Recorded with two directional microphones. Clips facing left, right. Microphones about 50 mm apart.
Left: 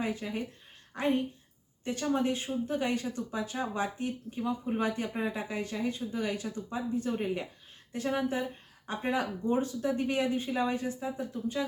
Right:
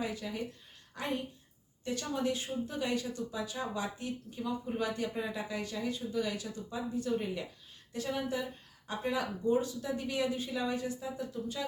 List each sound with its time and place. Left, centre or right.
0.0 s speech: left